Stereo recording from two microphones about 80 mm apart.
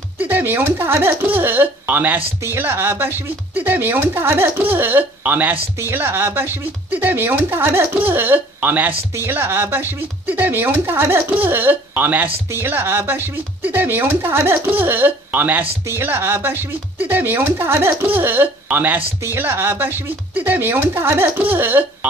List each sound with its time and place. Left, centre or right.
0.2 s speech: right